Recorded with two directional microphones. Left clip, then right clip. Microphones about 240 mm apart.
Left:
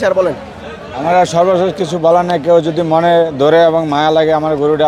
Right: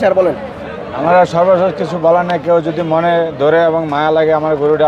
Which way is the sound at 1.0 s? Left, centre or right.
Centre.